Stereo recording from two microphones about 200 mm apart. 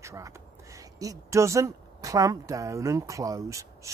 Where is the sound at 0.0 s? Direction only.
15° right (ahead or behind).